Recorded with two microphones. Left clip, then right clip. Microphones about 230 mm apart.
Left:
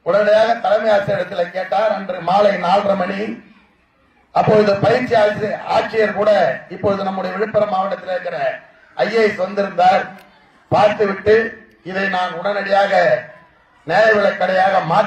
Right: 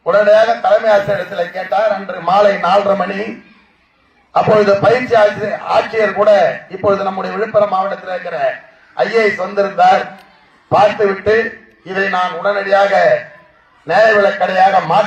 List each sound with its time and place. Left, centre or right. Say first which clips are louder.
0.0 s a man's voice: right 4 dB; right
4.4 s a man's voice: right 3 dB; right